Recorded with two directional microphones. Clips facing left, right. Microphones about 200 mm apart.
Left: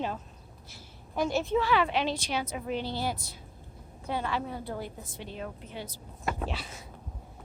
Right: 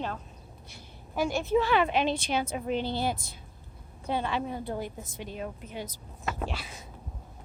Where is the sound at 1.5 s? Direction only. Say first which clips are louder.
Right 4 dB; 20° right (ahead or behind).